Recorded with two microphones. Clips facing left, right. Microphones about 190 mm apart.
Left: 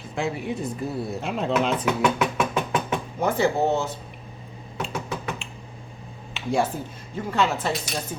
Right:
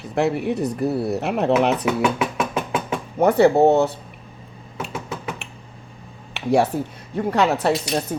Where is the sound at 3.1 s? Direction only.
65° right (ahead or behind).